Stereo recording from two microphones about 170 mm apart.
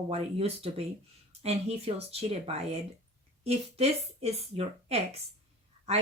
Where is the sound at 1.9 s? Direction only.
35° right (ahead or behind).